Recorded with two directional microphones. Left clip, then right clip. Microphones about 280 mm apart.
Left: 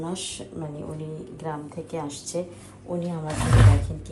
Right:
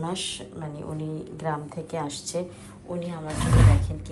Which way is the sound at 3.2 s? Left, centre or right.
Centre.